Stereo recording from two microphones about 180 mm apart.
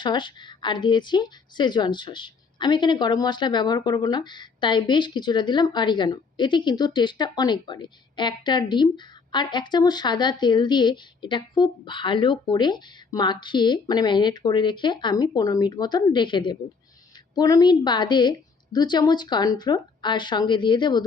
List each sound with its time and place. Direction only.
0.0 s a woman's voice: 25° left (ahead or behind)